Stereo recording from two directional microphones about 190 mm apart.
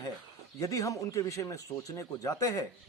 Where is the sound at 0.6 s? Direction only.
15° left (ahead or behind).